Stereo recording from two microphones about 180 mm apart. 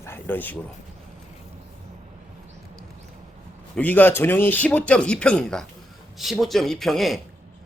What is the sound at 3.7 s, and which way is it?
A man's voice, 10° left (ahead or behind).